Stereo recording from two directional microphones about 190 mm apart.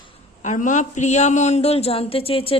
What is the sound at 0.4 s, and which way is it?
A woman's voice, 40° left (ahead or behind).